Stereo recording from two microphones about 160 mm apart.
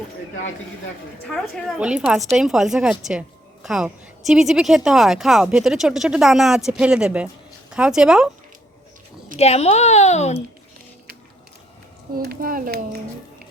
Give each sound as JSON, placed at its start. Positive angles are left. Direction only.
{"t": 1.3, "sound": "a woman's voice", "side_deg": -5}
{"t": 9.4, "sound": "speech", "side_deg": 40}
{"t": 12.1, "sound": "a child's voice", "side_deg": -70}